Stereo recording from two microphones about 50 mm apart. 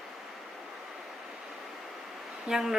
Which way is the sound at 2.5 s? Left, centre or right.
Centre.